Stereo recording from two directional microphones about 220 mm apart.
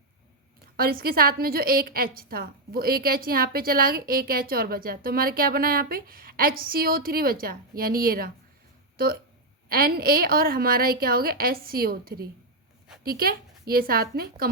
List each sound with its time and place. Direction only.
0.8 s a woman's voice: 45° right (ahead or behind)
9.6 s a woman's voice: 40° right (ahead or behind)